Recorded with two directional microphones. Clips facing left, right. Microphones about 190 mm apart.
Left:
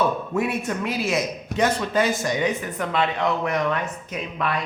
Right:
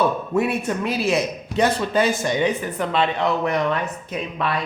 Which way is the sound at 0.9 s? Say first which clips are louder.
Right 4 dB; 30° right (ahead or behind).